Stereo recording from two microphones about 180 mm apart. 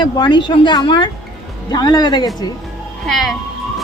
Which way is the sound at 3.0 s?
Centre (ahead or behind).